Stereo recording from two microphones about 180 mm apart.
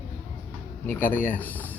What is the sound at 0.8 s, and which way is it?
Speech, 10° left (ahead or behind).